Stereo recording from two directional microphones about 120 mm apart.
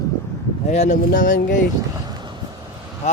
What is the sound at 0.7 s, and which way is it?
Speech, 80° left.